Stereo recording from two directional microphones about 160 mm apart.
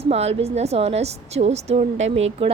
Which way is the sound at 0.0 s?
40° right (ahead or behind).